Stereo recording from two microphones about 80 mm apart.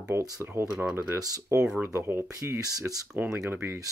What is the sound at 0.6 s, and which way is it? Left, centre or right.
Speech, right.